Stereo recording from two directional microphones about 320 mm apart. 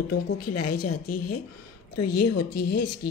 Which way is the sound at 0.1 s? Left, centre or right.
Left.